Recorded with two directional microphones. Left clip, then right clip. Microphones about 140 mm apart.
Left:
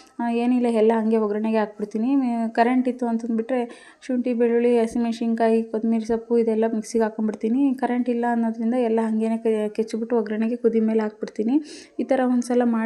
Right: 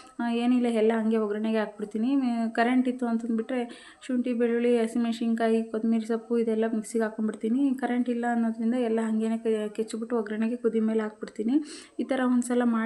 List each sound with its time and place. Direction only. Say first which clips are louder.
0.2 s speech: left 4 dB; 25° left (ahead or behind)